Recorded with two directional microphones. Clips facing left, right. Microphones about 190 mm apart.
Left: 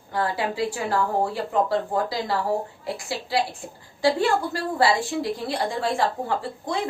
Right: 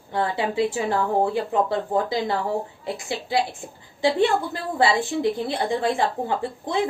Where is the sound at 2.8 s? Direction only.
20° right (ahead or behind).